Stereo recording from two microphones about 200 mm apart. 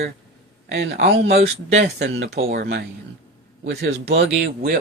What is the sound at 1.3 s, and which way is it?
Speech, 30° right (ahead or behind).